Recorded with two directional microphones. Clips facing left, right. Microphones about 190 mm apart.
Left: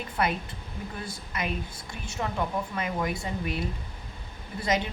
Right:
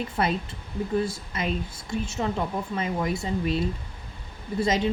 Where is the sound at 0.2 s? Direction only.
25° right (ahead or behind).